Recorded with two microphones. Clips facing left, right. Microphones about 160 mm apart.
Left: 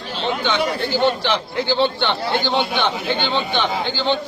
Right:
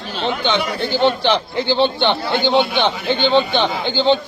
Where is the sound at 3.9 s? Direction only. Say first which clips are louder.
Right 8 dB; 20° right (ahead or behind).